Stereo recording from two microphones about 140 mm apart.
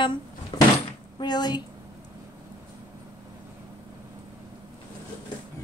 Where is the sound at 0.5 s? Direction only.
30° left (ahead or behind).